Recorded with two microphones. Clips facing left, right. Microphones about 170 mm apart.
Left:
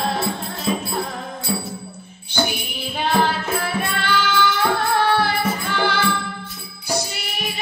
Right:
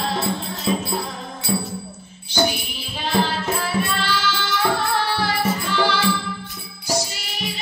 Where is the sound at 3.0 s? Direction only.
55° left (ahead or behind).